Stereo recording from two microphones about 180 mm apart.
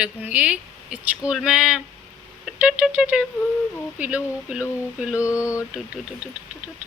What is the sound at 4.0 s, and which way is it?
Speech, 10° right (ahead or behind).